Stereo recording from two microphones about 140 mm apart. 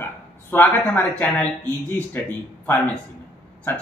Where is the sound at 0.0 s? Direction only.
15° left (ahead or behind).